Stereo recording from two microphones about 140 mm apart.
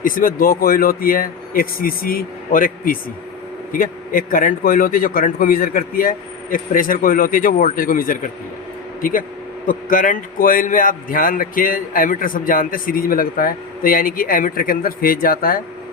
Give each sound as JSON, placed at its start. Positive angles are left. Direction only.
{"t": 0.0, "sound": "a man's voice", "side_deg": 80}